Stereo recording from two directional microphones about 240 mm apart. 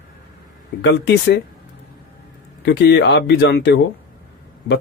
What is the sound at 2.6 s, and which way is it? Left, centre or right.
Speech, left.